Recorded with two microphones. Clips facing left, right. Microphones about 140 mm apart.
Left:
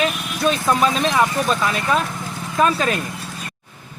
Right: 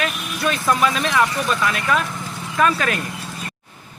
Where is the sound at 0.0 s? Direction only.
25° left (ahead or behind).